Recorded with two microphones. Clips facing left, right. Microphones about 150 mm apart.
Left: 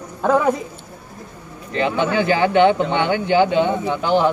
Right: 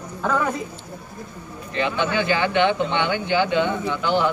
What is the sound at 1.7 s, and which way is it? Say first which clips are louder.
Speech: left 4 dB; 40° left (ahead or behind).